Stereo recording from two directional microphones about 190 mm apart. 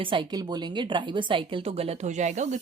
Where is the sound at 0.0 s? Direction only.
25° right (ahead or behind).